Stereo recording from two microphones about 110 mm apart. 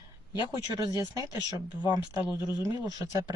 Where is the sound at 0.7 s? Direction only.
30° right (ahead or behind).